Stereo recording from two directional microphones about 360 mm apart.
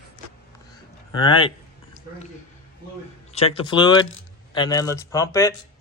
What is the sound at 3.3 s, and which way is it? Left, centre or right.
Speech, centre.